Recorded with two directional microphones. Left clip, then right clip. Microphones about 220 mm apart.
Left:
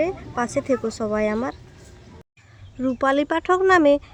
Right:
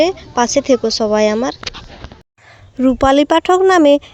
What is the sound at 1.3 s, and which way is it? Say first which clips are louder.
Speech: right 8 dB; 20° right (ahead or behind).